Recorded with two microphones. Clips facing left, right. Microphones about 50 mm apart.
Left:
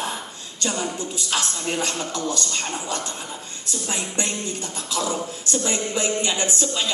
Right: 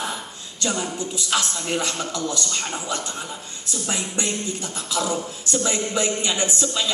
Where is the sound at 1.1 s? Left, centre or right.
Left.